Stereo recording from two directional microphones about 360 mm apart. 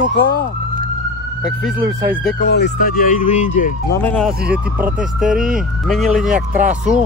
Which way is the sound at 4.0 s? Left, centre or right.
Centre.